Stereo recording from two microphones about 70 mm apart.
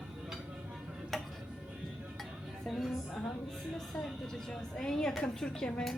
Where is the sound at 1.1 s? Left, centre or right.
Centre.